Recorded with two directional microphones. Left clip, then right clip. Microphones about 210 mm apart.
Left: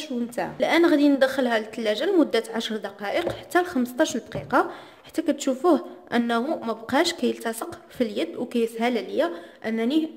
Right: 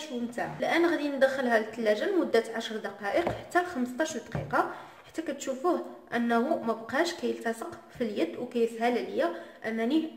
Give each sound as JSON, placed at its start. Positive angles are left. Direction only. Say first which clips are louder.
{"t": 0.4, "sound": "a woman's voice", "louder": "left 6 dB", "side_deg": 45}